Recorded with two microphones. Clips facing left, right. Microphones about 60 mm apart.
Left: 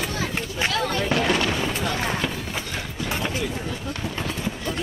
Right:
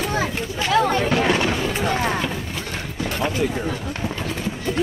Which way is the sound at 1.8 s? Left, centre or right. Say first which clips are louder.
Right 4 dB; right.